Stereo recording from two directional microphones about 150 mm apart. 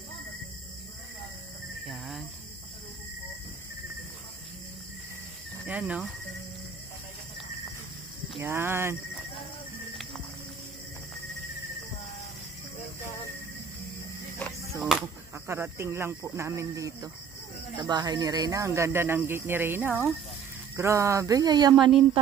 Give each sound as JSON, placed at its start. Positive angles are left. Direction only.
{"t": 1.9, "sound": "cricket", "side_deg": 0}
{"t": 5.7, "sound": "speech", "side_deg": -10}
{"t": 8.4, "sound": "speech", "side_deg": -15}
{"t": 14.4, "sound": "a sound", "side_deg": 10}
{"t": 14.8, "sound": "speech", "side_deg": -5}
{"t": 15.3, "sound": "speech", "side_deg": -15}